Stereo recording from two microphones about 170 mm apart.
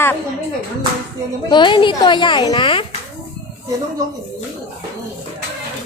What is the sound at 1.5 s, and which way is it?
A woman's voice, 30° left (ahead or behind).